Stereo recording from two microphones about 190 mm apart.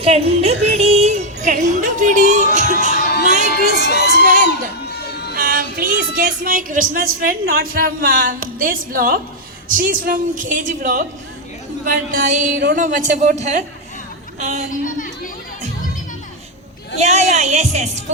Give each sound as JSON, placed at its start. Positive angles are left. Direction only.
{"t": 0.0, "sound": "speech", "side_deg": -30}
{"t": 0.7, "sound": "music", "side_deg": -35}
{"t": 2.8, "sound": "crowd", "side_deg": -40}
{"t": 3.8, "sound": "speech", "side_deg": 65}
{"t": 4.2, "sound": "speech", "side_deg": -45}
{"t": 4.4, "sound": "a sound", "side_deg": 60}
{"t": 5.3, "sound": "a woman's voice", "side_deg": -50}
{"t": 12.1, "sound": "speech", "side_deg": -40}
{"t": 14.7, "sound": "speech", "side_deg": 45}
{"t": 17.0, "sound": "speech", "side_deg": -35}